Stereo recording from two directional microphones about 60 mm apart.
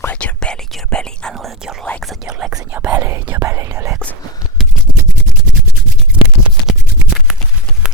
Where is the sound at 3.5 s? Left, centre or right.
Right.